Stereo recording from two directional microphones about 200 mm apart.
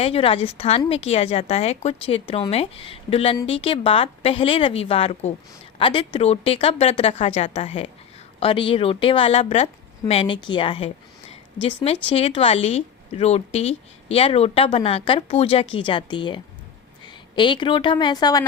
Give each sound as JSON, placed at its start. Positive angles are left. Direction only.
{"t": 0.0, "sound": "a woman's voice", "side_deg": 30}